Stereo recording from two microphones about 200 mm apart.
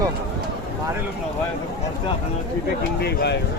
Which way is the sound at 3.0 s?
55° left (ahead or behind).